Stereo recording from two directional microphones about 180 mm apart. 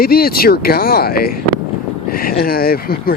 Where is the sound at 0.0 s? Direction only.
55° left (ahead or behind).